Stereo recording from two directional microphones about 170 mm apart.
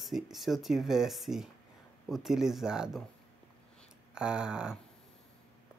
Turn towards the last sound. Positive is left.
turn(degrees=-5)  # may be behind; listen again after turning